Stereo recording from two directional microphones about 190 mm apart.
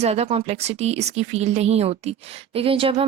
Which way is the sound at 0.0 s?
35° right (ahead or behind).